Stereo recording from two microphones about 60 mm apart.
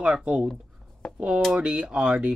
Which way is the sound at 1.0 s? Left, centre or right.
Centre.